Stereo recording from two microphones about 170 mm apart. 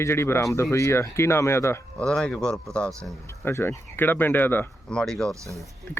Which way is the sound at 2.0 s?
5° left (ahead or behind).